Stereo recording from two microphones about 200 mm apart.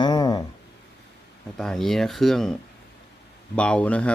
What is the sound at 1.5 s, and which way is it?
Speech, centre (ahead or behind).